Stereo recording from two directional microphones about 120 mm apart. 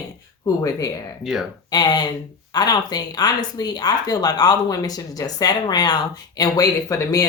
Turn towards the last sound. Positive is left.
turn(degrees=30)  # may be behind; listen again after turning